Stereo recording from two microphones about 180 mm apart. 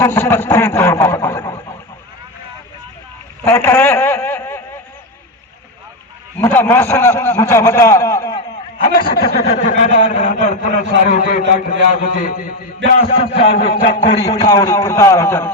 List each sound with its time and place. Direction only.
0.0 s a man's voice: 10° left (ahead or behind)
3.4 s a sound: 15° left (ahead or behind)
6.4 s a man's voice: 10° left (ahead or behind)
9.0 s speech: 60° left (ahead or behind)
9.6 s a man's voice: 40° left (ahead or behind)
13.3 s a man's voice: 35° left (ahead or behind)
14.1 s a man's voice: 20° left (ahead or behind)